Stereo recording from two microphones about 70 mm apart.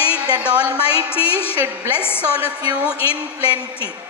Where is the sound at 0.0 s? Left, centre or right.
Left.